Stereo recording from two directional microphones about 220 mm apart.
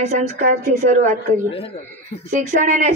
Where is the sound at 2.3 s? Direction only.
35° right (ahead or behind).